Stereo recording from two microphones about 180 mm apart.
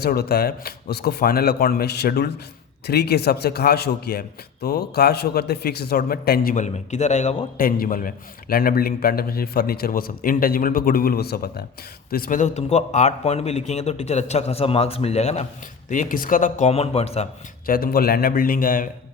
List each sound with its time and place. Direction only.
0.0 s a man's voice: 60° left (ahead or behind)
12.1 s a man's voice: 50° left (ahead or behind)
15.9 s speech: 50° left (ahead or behind)
17.7 s speech: 55° left (ahead or behind)